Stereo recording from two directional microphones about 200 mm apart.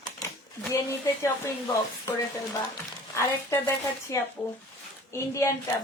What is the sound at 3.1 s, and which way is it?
A woman's voice, 15° left (ahead or behind).